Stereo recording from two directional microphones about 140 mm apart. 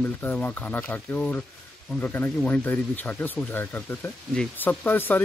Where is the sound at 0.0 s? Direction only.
15° left (ahead or behind).